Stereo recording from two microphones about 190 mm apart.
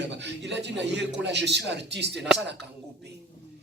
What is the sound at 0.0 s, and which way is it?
A man's voice, 65° right (ahead or behind).